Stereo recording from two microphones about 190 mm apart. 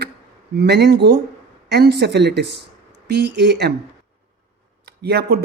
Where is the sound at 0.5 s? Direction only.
60° right (ahead or behind).